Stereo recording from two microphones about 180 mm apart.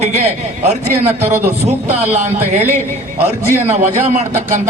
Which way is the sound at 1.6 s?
40° right (ahead or behind).